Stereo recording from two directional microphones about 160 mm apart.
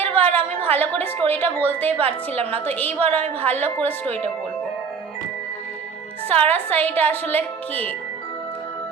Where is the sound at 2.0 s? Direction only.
40° right (ahead or behind).